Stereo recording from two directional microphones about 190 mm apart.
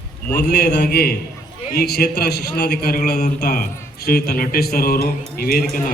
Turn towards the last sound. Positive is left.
turn(degrees=50)  # may be behind; listen again after turning